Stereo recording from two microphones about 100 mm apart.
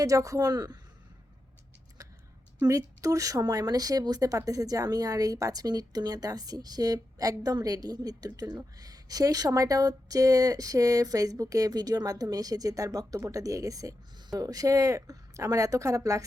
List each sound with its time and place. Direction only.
0.0 s speech: 35° right (ahead or behind)
2.6 s speech: 35° right (ahead or behind)